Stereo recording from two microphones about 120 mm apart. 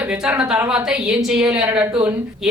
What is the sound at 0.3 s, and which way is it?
A woman's voice, 5° right (ahead or behind).